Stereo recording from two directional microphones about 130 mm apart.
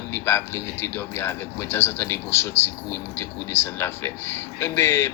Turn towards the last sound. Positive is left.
turn(degrees=20)  # may be behind; listen again after turning